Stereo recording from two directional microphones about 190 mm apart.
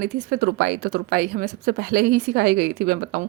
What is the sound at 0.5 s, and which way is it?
Speech, 60° right (ahead or behind).